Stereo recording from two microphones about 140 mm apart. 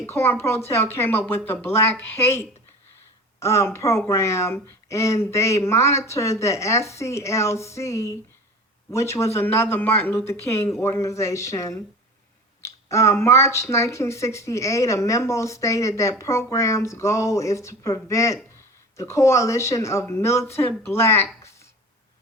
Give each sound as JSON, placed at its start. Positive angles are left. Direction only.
{"t": 0.0, "sound": "speech", "side_deg": 15}